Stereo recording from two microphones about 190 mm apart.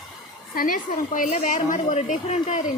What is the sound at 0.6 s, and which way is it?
A woman's voice, 45° left (ahead or behind).